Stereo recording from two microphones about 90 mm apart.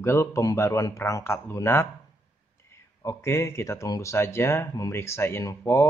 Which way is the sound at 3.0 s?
30° left (ahead or behind).